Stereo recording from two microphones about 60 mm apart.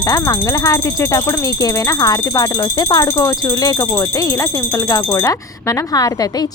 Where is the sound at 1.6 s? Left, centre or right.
Left.